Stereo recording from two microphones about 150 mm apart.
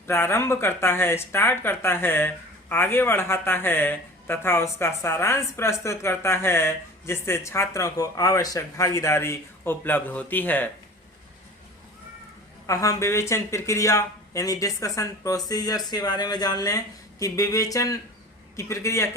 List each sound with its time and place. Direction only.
0.1 s speech: 15° left (ahead or behind)
12.6 s speech: 20° left (ahead or behind)